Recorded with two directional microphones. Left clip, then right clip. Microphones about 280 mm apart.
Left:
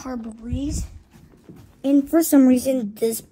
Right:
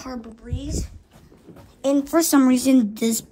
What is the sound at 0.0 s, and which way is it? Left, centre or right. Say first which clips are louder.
Speech: left 2 dB; centre.